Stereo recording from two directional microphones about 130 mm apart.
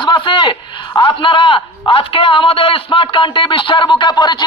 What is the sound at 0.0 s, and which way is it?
A man's voice, 40° left (ahead or behind).